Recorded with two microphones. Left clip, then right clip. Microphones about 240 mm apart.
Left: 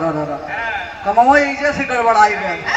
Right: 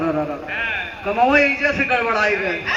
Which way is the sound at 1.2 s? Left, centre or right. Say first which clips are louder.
Left 3 dB; left.